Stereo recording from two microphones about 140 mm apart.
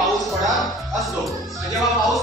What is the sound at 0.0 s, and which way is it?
Music, centre (ahead or behind).